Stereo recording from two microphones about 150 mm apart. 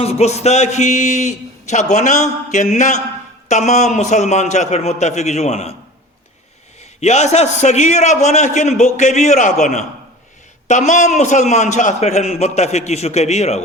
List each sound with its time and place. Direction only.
0.0 s speech: 45° left (ahead or behind)
7.0 s speech: 50° left (ahead or behind)